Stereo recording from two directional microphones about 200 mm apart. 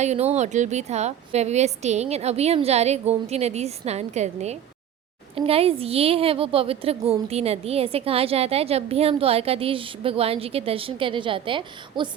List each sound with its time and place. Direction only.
0.0 s a woman's voice: 35° right (ahead or behind)